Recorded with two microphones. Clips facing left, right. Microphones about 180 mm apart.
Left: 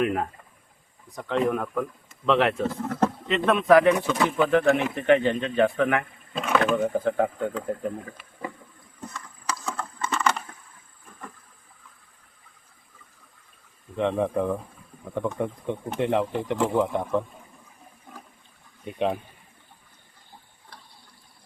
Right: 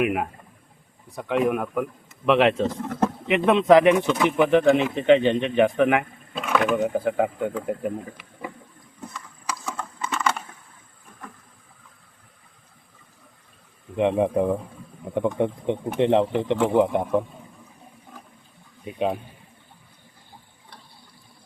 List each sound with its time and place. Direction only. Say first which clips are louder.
0.0 s speech: right 1 dB; 10° right (ahead or behind)
6.3 s speech: right 1 dB; centre (ahead or behind)
9.5 s computer keyboard: even; 10° right (ahead or behind)
13.9 s speech: right 4 dB; 15° right (ahead or behind)
18.9 s speech: right 1 dB; centre (ahead or behind)